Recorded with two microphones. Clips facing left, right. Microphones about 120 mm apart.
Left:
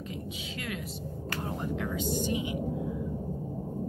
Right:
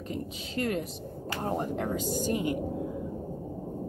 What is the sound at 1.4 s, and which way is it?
Speech, 45° right (ahead or behind).